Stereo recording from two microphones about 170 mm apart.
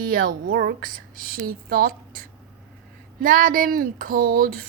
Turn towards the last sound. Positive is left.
turn(degrees=-55)  # may be behind; listen again after turning